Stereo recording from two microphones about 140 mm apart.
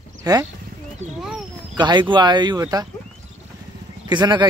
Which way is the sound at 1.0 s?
55° right (ahead or behind).